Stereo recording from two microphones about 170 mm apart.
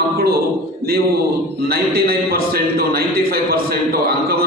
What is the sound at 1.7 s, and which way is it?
A man's voice, 65° right (ahead or behind).